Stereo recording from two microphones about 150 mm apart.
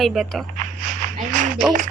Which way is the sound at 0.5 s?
60° right (ahead or behind).